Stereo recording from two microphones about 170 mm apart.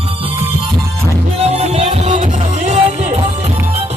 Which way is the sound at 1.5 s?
40° right (ahead or behind).